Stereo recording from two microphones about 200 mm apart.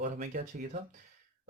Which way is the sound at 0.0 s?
40° right (ahead or behind).